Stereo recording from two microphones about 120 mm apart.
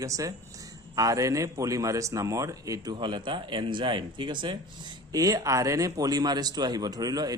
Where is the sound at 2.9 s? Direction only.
40° right (ahead or behind).